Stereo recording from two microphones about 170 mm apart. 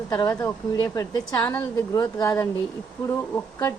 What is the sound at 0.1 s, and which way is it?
A woman's voice, 20° left (ahead or behind).